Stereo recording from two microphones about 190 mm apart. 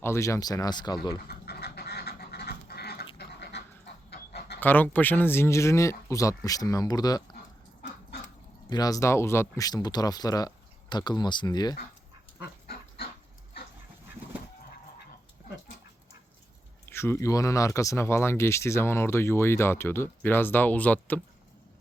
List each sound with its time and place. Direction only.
0.0 s speech: 15° left (ahead or behind)
1.3 s duck: 55° left (ahead or behind)
4.6 s speech: 10° left (ahead or behind)
8.7 s speech: 20° left (ahead or behind)
12.6 s livestock: 55° left (ahead or behind)
16.9 s speech: 15° left (ahead or behind)